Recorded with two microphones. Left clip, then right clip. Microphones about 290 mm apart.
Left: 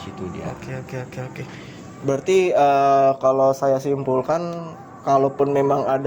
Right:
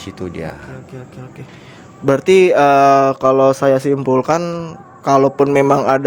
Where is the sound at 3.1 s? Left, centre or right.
Right.